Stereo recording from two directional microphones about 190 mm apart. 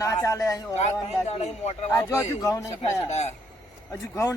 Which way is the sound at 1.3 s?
35° left (ahead or behind).